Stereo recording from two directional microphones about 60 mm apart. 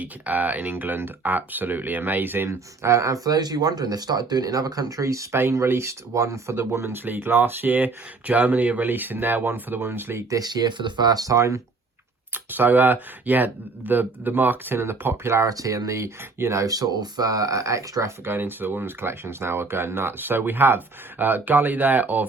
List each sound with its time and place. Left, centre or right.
0.0 s speech: right
2.5 s speech: right
5.0 s speech: right
5.4 s speech: right
7.0 s speech: right
10.2 s speech: right
12.3 s speech: right
15.4 s speech: right
16.6 s speech: right
18.3 s speech: right